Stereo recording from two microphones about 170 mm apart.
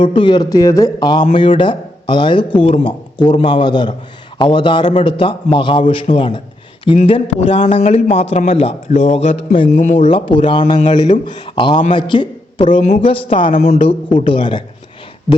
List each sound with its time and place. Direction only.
0.0 s a man's voice: 30° left (ahead or behind)
6.9 s speech: 40° left (ahead or behind)
9.7 s a man's voice: 45° left (ahead or behind)
10.0 s a man's voice: 30° left (ahead or behind)